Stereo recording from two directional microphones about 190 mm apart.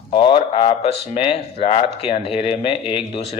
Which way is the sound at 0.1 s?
25° left (ahead or behind).